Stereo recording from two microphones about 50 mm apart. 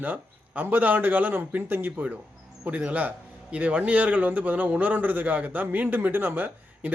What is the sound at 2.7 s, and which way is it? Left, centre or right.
A man's voice, right.